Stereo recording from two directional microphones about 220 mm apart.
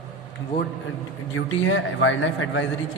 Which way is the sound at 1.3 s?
65° left (ahead or behind).